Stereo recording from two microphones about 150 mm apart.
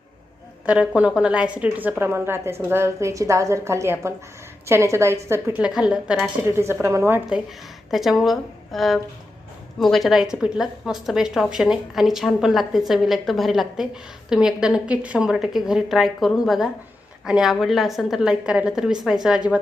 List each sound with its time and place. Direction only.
0.6 s a woman's voice: 10° right (ahead or behind)
6.5 s a woman's voice: 15° right (ahead or behind)
7.9 s a woman's voice: centre (ahead or behind)